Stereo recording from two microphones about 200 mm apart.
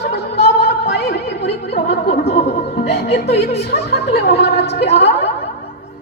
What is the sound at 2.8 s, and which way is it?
Speech, 55° left (ahead or behind).